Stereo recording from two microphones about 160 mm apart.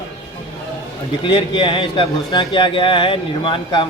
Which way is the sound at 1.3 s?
30° left (ahead or behind).